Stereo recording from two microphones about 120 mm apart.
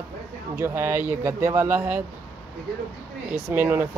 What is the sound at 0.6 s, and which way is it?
Speech, 20° right (ahead or behind).